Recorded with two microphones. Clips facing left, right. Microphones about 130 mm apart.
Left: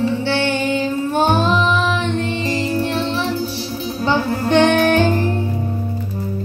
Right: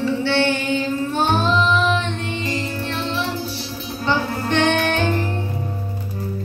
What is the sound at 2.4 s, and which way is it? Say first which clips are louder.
Music: left 4 dB; 35° left (ahead or behind).